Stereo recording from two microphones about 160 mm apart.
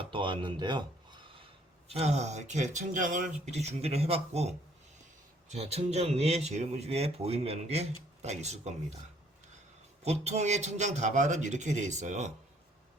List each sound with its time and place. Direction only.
0.0 s speech: 30° right (ahead or behind)
1.9 s speech: 40° right (ahead or behind)
10.0 s speech: 40° right (ahead or behind)